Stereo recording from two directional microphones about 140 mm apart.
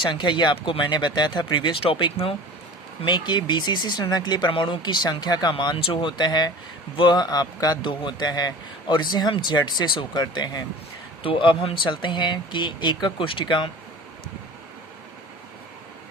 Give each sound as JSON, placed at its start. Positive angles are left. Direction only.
{"t": 0.0, "sound": "speech", "side_deg": 35}